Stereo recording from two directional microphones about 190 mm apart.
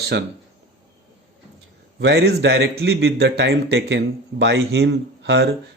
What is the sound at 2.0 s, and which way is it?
A man's voice, 65° right (ahead or behind).